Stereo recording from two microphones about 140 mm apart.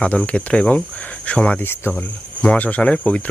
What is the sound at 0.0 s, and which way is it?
Speech, 10° left (ahead or behind).